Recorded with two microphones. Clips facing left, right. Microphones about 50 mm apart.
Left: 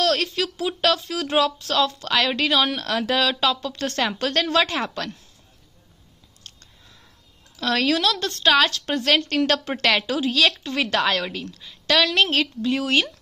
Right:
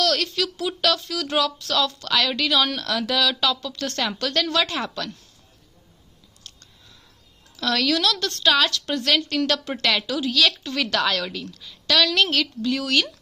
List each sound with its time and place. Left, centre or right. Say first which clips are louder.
0.0 s a sound: left 1 dB; left
0.4 s a woman's voice: left 1 dB; left
6.4 s a sound: left 1 dB; left
7.5 s speech: left 1 dB; left
8.1 s a woman's voice: left 1 dB; centre
8.4 s a woman's voice: left 2 dB; left